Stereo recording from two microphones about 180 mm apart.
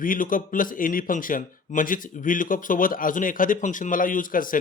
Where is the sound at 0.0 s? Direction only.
50° left (ahead or behind).